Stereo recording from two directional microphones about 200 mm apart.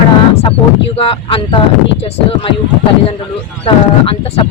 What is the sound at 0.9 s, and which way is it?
Speech, 30° left (ahead or behind).